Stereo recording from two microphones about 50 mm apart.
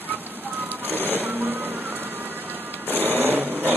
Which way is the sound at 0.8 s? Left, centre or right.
Right.